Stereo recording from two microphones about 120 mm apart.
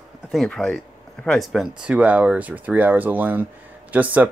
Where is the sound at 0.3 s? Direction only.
5° left (ahead or behind).